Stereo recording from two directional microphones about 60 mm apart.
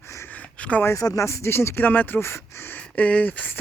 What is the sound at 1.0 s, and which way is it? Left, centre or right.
Speech, left.